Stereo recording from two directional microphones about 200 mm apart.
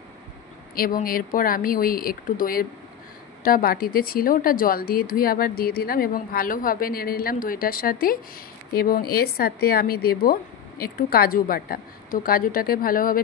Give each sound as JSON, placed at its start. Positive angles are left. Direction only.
{"t": 0.7, "sound": "a woman's voice", "side_deg": 45}